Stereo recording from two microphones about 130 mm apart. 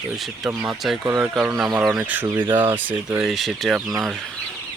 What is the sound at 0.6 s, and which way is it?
Speech, 5° right (ahead or behind).